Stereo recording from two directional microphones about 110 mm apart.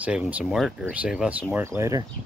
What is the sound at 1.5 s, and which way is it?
Speech, 25° right (ahead or behind).